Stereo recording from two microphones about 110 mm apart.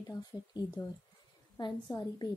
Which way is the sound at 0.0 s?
35° left (ahead or behind).